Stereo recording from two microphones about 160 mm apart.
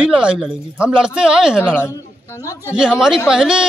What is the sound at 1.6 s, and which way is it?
Speech, 15° left (ahead or behind).